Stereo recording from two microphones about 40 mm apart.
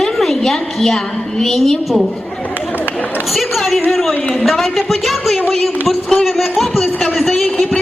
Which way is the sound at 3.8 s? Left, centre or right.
Centre.